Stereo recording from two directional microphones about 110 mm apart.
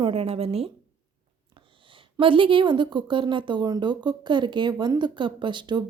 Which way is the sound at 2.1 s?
50° right (ahead or behind).